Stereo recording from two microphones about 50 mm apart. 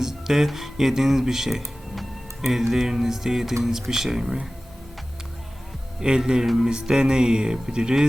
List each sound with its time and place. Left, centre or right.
0.0 s speech: centre
6.0 s speech: centre